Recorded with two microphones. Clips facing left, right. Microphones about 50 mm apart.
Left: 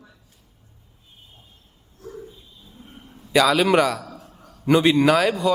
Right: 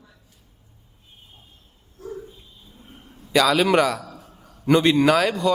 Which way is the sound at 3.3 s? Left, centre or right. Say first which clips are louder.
Left 1 dB; centre.